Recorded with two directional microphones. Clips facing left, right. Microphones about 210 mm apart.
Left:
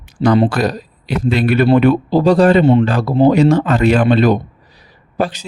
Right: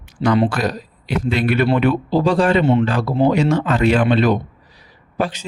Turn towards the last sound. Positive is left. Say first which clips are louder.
# left 3 dB
turn(degrees=40)  # may be behind; listen again after turning